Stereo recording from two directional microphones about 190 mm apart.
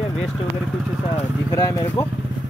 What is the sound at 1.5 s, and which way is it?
Speech, 15° left (ahead or behind).